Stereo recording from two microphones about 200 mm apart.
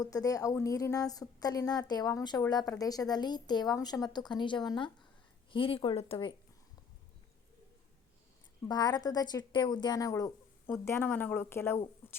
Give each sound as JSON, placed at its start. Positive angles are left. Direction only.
{"t": 0.0, "sound": "a woman's voice", "side_deg": 15}
{"t": 8.6, "sound": "a woman's voice", "side_deg": 20}